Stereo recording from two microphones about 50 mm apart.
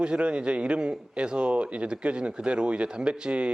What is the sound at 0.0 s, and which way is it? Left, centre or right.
A man's voice, centre.